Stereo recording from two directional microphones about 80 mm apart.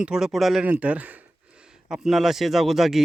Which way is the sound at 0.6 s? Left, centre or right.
Centre.